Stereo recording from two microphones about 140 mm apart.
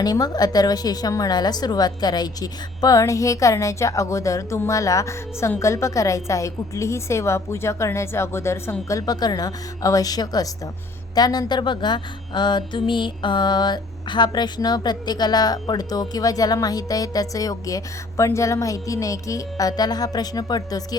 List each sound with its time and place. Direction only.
0.0 s mantra: 25° left (ahead or behind)